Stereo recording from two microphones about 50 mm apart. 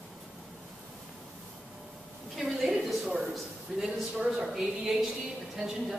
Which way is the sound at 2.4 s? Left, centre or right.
Centre.